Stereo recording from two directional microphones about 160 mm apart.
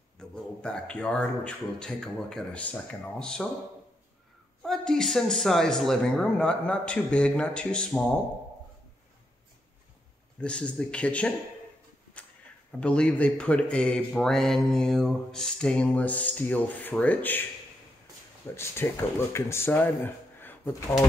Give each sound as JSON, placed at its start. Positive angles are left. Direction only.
{"t": 0.2, "sound": "a man's voice", "side_deg": 5}
{"t": 4.6, "sound": "a man's voice", "side_deg": 5}
{"t": 10.4, "sound": "speech", "side_deg": 5}
{"t": 12.2, "sound": "a sound", "side_deg": 10}
{"t": 12.8, "sound": "speech", "side_deg": 5}
{"t": 18.6, "sound": "speech", "side_deg": 15}